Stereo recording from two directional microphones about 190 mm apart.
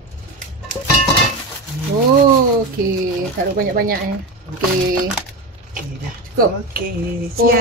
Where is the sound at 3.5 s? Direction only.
50° right (ahead or behind).